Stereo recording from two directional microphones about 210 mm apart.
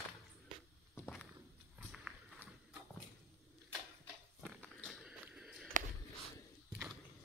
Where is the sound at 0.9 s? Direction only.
5° left (ahead or behind).